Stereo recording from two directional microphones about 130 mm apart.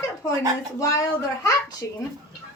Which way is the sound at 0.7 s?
25° left (ahead or behind).